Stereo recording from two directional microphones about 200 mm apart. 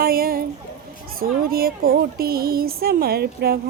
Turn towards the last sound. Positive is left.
turn(degrees=-50)  # may be behind; listen again after turning